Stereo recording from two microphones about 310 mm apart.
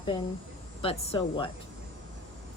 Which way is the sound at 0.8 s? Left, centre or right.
Centre.